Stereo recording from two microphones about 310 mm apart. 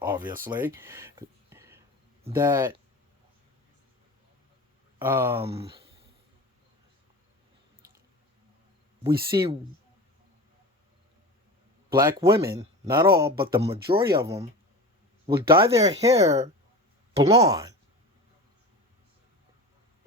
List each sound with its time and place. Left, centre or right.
0.0 s speech: centre
4.9 s speech: centre
5.5 s speech: centre
9.3 s speech: centre
12.1 s speech: centre